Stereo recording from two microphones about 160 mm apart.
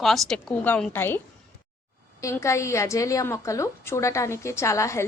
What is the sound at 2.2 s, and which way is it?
A woman's voice, 20° left (ahead or behind).